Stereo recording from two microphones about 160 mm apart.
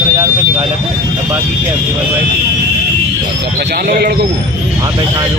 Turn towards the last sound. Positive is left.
turn(degrees=-75)  # may be behind; listen again after turning